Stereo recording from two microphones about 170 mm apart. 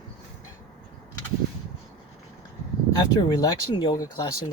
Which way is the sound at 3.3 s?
25° left (ahead or behind).